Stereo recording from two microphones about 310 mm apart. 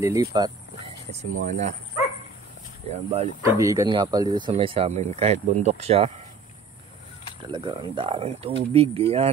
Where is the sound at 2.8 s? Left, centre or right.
Right.